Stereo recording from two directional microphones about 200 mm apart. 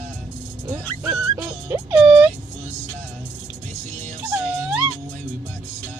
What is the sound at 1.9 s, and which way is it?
Speech, 5° right (ahead or behind).